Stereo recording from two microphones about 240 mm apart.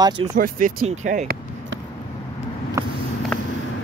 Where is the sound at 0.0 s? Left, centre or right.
Centre.